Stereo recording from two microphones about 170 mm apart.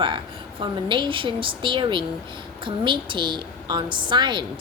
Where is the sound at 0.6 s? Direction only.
30° right (ahead or behind).